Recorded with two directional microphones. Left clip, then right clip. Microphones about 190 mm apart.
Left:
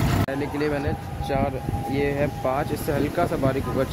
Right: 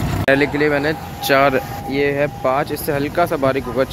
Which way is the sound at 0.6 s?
5° right (ahead or behind).